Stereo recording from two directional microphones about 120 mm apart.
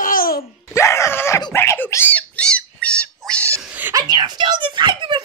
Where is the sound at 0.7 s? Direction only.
25° left (ahead or behind).